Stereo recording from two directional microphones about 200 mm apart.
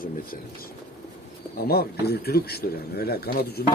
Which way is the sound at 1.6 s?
50° left (ahead or behind).